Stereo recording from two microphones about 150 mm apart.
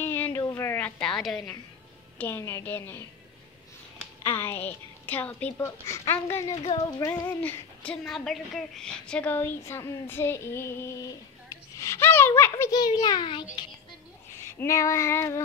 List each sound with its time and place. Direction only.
0.0 s a sound: 15° left (ahead or behind)
2.1 s speech: 15° left (ahead or behind)
4.2 s speech: 15° left (ahead or behind)
6.5 s a sound: 40° left (ahead or behind)
7.1 s a child's voice: 10° left (ahead or behind); by 13.5 s 30° left (ahead or behind)
14.6 s a child's voice: 20° left (ahead or behind)